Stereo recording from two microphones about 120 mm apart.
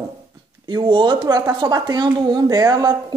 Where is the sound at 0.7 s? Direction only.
40° right (ahead or behind).